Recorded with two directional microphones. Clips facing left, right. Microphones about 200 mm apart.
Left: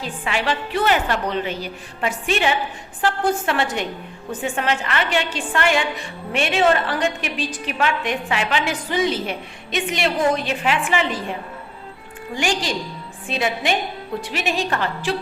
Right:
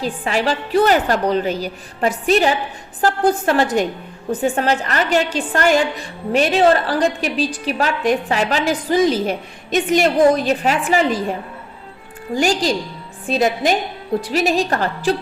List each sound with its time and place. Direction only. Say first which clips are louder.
0.0 s a woman's voice: right 5 dB; 40° right (ahead or behind)